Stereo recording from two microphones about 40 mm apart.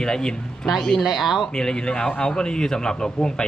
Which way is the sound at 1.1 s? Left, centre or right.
Centre.